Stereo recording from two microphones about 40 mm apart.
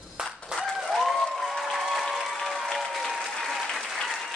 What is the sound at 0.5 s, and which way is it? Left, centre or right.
Applause, centre.